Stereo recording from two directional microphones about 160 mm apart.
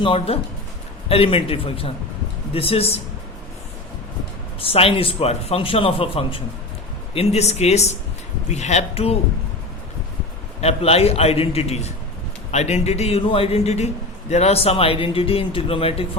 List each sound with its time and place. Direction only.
0.0 s a man's voice: 35° left (ahead or behind)
4.6 s a man's voice: 35° left (ahead or behind)
10.6 s a man's voice: 40° left (ahead or behind)